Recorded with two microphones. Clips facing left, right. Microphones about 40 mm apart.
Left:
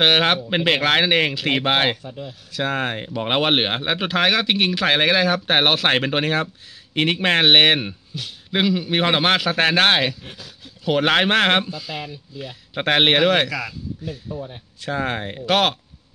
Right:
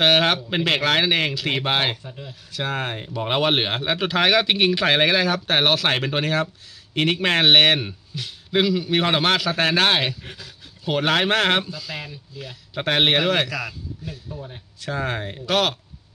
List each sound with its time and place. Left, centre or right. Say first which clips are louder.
0.0 s speech: left 1 dB; centre
2.0 s speech: left 4 dB; centre
2.7 s speech: left 2 dB; left
4.1 s speech: even; centre; by 11.9 s left
11.9 s speech: left 2 dB; centre
12.7 s speech: left 2 dB; left
14.8 s speech: left 2 dB; left